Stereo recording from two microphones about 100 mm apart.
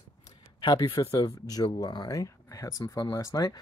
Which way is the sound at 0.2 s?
45° left (ahead or behind).